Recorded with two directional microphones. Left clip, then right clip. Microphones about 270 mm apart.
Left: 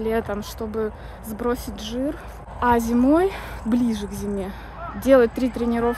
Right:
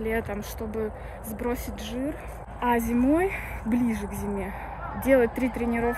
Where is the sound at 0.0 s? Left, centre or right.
Centre.